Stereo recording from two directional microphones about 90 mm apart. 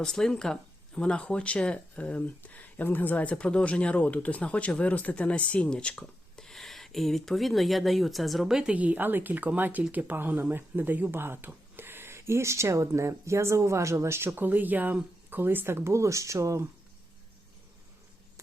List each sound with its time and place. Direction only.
0.0 s speech: 5° left (ahead or behind); by 16.6 s 35° right (ahead or behind)